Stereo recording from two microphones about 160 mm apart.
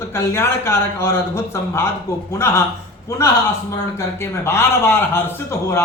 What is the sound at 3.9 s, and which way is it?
A man's voice, 15° left (ahead or behind).